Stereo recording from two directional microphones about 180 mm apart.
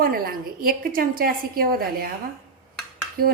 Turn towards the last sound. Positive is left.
turn(degrees=-55)  # may be behind; listen again after turning